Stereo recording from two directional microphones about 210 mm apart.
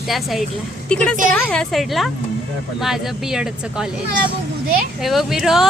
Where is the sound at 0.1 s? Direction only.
Centre (ahead or behind).